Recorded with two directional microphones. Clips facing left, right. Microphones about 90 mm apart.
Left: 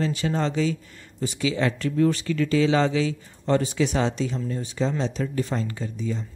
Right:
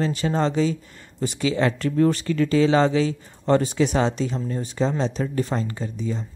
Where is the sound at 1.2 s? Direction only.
40° right (ahead or behind).